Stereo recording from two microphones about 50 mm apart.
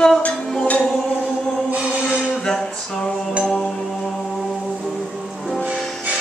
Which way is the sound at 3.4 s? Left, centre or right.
Centre.